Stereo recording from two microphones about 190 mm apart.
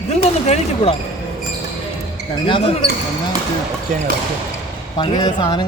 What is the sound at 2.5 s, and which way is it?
Speech, 30° left (ahead or behind).